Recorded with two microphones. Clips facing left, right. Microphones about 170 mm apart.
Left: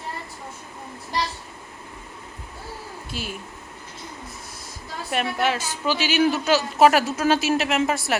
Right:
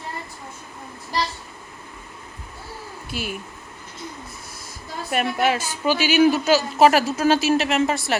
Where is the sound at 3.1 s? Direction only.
10° right (ahead or behind).